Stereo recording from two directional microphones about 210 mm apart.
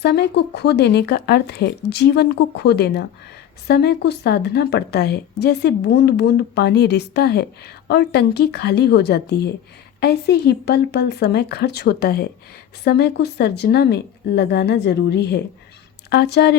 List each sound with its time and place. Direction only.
0.0 s a woman's voice: 50° left (ahead or behind)